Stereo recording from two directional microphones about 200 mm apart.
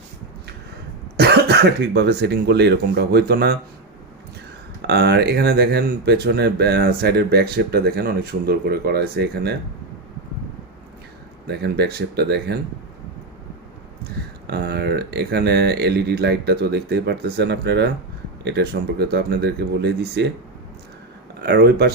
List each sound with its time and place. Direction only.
1.1 s speech: 55° right (ahead or behind)
4.8 s speech: 55° right (ahead or behind)
11.4 s speech: 55° right (ahead or behind)
14.4 s speech: 50° right (ahead or behind)
21.4 s speech: 55° right (ahead or behind)